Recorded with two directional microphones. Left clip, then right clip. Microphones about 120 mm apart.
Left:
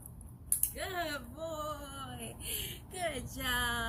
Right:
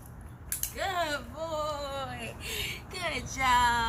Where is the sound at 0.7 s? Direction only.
20° right (ahead or behind).